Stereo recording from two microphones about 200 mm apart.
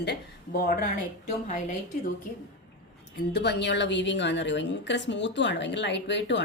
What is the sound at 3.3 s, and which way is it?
A woman's voice, 55° left (ahead or behind).